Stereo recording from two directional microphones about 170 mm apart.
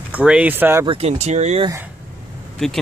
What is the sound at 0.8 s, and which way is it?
Speech, 35° right (ahead or behind).